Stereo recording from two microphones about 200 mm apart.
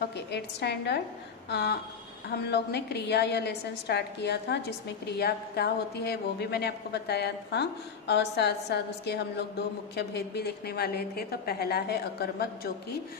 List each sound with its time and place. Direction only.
0.0 s a woman's voice: 55° left (ahead or behind)